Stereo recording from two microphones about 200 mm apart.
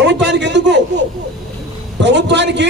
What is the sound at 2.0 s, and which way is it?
Speech, 60° right (ahead or behind).